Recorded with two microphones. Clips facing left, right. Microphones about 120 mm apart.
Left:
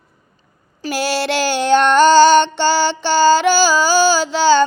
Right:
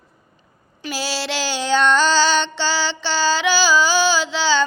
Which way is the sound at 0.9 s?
55° left (ahead or behind).